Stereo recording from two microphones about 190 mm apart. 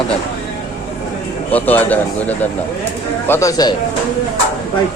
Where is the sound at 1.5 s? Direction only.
10° left (ahead or behind).